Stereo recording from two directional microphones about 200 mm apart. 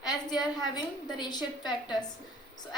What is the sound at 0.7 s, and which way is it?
A woman's voice, 20° left (ahead or behind).